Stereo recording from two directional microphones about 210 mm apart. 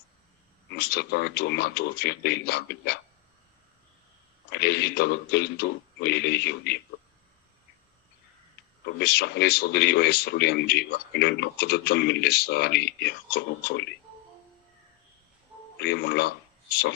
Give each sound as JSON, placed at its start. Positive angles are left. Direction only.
{"t": 0.7, "sound": "speech", "side_deg": 50}
{"t": 4.5, "sound": "speech", "side_deg": 50}
{"t": 9.0, "sound": "speech", "side_deg": 50}
{"t": 15.8, "sound": "speech", "side_deg": 50}